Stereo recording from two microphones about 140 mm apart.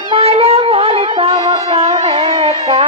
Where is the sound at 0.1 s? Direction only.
45° right (ahead or behind).